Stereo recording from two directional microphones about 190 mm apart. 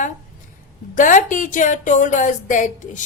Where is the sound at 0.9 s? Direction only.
45° left (ahead or behind).